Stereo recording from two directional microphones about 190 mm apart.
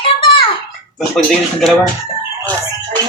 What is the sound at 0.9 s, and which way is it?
Speech, centre (ahead or behind).